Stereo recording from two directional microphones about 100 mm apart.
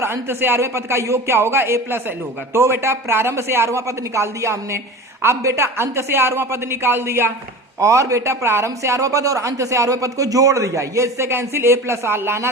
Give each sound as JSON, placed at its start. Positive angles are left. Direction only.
{"t": 0.0, "sound": "a man's voice", "side_deg": -25}